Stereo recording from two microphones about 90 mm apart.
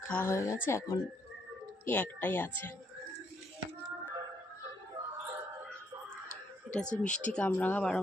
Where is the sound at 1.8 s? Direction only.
15° left (ahead or behind).